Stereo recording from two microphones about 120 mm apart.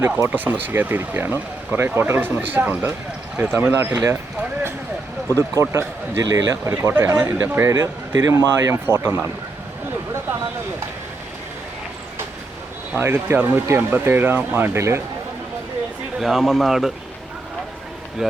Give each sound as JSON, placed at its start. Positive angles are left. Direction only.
{"t": 0.0, "sound": "speech", "side_deg": -20}
{"t": 5.4, "sound": "speech", "side_deg": -25}
{"t": 13.0, "sound": "speech", "side_deg": -20}
{"t": 16.2, "sound": "speech", "side_deg": 0}
{"t": 18.2, "sound": "speech", "side_deg": -5}